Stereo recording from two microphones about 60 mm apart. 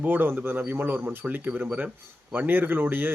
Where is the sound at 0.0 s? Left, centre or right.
Right.